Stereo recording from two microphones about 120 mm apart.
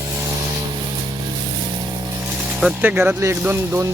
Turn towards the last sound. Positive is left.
turn(degrees=-20)  # may be behind; listen again after turning